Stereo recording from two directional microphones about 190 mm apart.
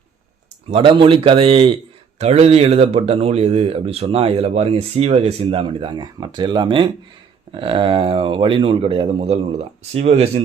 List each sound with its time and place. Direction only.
0.7 s speech: 30° right (ahead or behind)